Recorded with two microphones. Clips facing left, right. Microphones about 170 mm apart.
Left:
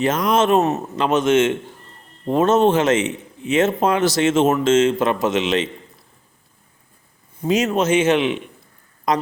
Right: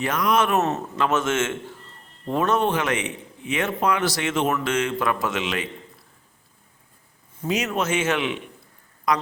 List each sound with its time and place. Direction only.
0.0 s a man's voice: 25° left (ahead or behind)
7.4 s a man's voice: 30° left (ahead or behind)